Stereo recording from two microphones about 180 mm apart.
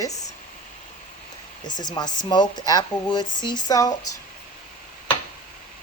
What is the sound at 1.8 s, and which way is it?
Speech, 25° left (ahead or behind).